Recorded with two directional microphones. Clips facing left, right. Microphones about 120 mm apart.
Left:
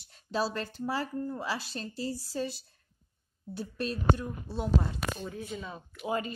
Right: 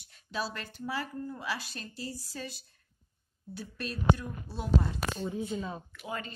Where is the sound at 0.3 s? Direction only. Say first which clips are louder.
Left 5 dB; 30° left (ahead or behind).